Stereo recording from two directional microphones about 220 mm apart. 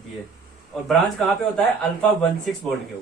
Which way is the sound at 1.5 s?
5° left (ahead or behind).